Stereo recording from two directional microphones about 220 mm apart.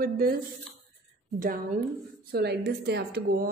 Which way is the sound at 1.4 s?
35° right (ahead or behind).